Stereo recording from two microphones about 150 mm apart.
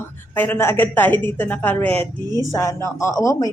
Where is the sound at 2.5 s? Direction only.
20° left (ahead or behind).